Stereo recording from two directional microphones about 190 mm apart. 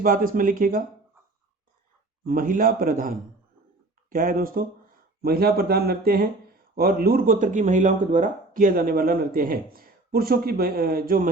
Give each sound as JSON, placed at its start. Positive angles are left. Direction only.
{"t": 0.0, "sound": "speech", "side_deg": -45}
{"t": 2.2, "sound": "speech", "side_deg": -50}